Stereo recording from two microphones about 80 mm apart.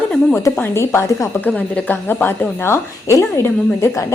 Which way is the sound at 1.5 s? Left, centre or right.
Centre.